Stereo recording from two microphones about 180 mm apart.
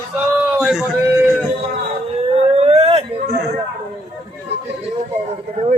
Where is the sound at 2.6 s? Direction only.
35° right (ahead or behind).